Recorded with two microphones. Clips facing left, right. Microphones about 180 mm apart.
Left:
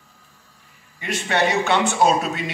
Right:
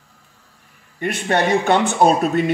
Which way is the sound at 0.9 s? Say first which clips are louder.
Right 3 dB; 55° right (ahead or behind).